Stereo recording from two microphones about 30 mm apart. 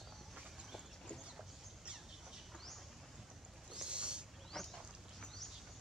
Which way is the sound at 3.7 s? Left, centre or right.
Right.